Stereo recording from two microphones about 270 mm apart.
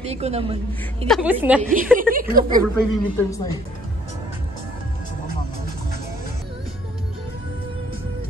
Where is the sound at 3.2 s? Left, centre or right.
Centre.